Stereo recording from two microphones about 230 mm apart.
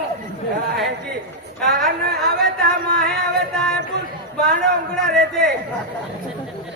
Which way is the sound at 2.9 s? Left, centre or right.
Centre.